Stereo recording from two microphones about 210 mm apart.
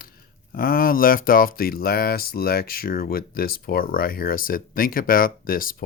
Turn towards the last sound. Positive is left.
turn(degrees=40)  # may be behind; listen again after turning